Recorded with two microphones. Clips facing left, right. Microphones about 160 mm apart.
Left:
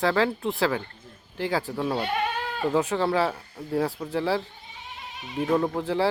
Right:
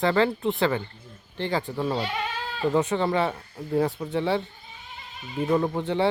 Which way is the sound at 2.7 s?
Centre (ahead or behind).